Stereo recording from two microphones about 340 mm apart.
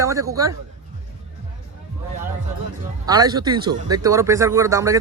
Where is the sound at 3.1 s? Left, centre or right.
Centre.